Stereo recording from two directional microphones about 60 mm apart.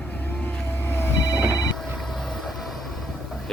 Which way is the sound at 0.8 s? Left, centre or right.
Left.